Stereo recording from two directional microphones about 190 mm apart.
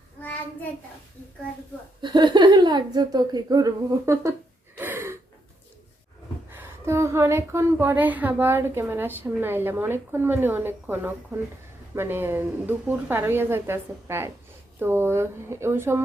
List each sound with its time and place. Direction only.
0.2 s child singing: 10° left (ahead or behind)
2.0 s speech: 25° right (ahead or behind)
4.8 s gasp: 10° right (ahead or behind)
6.5 s a woman's voice: 10° right (ahead or behind)